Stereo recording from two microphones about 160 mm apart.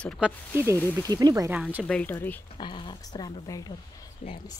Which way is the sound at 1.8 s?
10° left (ahead or behind).